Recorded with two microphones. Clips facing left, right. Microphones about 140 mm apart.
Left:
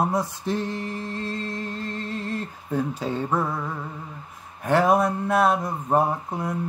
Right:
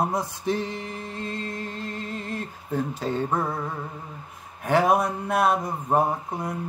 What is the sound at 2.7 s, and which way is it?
Speech, 5° left (ahead or behind).